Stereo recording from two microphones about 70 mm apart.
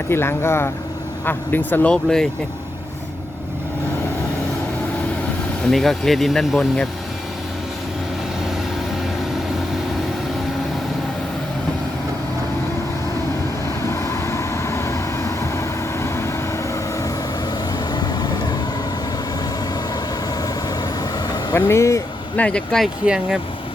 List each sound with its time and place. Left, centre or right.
0.1 s speech: left
1.9 s speech: centre
5.7 s speech: centre
13.8 s vehicle: left
17.7 s vehicle: left
20.7 s vehicle: left
21.5 s speech: left
22.4 s speech: centre
23.0 s speech: centre